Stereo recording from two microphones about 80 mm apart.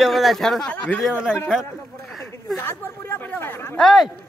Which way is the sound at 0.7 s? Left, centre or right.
Centre.